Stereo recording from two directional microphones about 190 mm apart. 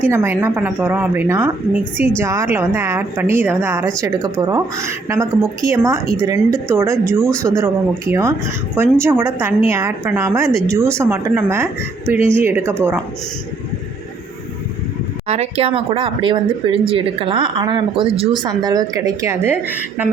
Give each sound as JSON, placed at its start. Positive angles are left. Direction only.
{"t": 0.0, "sound": "a woman's voice", "side_deg": -10}
{"t": 15.3, "sound": "a woman's voice", "side_deg": -30}